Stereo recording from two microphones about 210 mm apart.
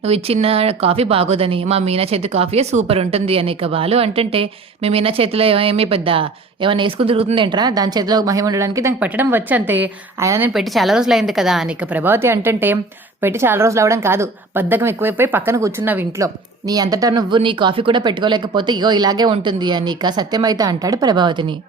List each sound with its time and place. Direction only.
0.0 s speech: 30° right (ahead or behind); by 10.5 s 15° right (ahead or behind)
10.5 s a woman's voice: centre (ahead or behind); by 21.4 s 20° right (ahead or behind)